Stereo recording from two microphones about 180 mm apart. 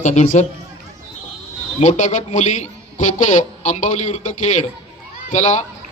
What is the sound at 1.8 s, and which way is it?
A man's voice, 40° left (ahead or behind).